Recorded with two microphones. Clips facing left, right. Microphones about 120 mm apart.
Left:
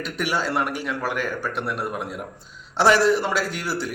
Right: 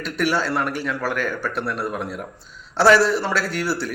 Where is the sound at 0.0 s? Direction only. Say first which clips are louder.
Right 3 dB; 15° left (ahead or behind).